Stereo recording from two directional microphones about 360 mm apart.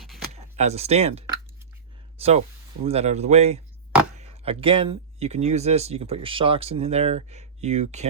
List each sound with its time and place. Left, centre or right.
0.3 s speech: centre
2.1 s a sound: centre
2.8 s speech: centre